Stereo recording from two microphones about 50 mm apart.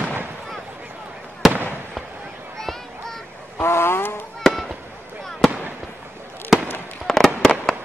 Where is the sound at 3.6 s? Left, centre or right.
Left.